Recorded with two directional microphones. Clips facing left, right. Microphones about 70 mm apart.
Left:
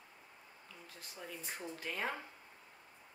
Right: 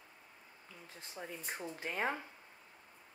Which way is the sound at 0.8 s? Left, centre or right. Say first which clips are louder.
Right 3 dB; right.